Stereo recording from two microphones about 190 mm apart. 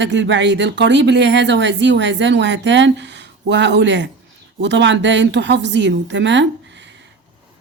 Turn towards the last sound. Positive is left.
turn(degrees=-70)  # may be behind; listen again after turning